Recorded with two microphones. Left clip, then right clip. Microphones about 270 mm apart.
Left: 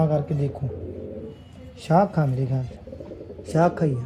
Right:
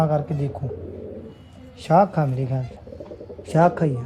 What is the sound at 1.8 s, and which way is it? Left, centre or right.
Speech, right.